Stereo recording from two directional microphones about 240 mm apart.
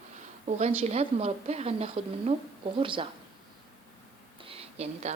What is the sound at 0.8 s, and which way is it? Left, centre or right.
A woman's voice, right.